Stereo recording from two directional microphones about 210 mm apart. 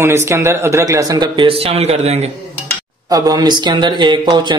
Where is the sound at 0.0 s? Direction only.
15° right (ahead or behind); by 2.3 s 30° right (ahead or behind).